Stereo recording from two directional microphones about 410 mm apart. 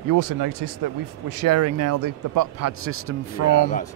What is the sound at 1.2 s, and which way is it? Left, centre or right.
Speech, right.